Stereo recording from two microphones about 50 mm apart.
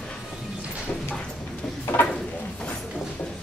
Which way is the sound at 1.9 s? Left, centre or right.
Left.